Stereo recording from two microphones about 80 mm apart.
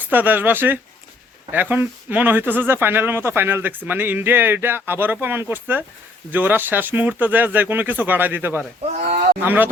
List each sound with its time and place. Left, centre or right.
0.0 s speech: right